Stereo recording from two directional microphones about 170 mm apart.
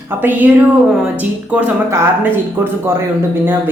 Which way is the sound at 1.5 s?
10° right (ahead or behind).